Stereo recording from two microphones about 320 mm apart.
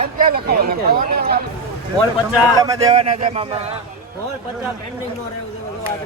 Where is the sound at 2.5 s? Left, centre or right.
Centre.